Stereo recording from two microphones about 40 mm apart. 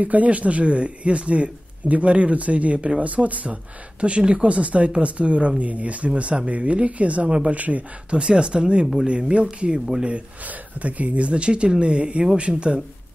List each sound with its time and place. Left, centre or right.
0.0 s speech: right
4.0 s speech: right
8.2 s speech: right
10.4 s speech: right